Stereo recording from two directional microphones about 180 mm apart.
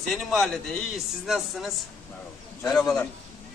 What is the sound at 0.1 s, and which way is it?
Speech, centre (ahead or behind).